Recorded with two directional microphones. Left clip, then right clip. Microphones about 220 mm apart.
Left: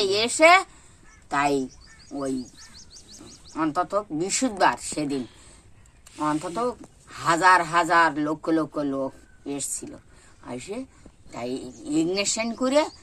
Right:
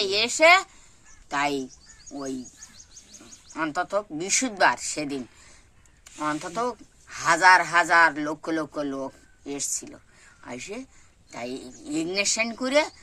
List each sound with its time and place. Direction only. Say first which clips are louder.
0.0 s a man's voice: left 1 dB; 10° right (ahead or behind)
2.4 s bird: left 3 dB; 50° right (ahead or behind)
3.5 s a man's voice: left 2 dB; 15° right (ahead or behind)